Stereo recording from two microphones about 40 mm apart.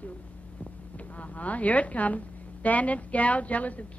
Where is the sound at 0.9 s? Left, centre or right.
Left.